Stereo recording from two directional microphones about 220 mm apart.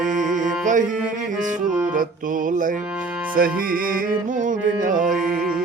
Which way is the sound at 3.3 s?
40° right (ahead or behind).